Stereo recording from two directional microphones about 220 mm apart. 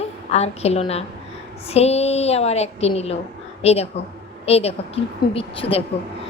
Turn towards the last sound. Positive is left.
turn(degrees=25)  # may be behind; listen again after turning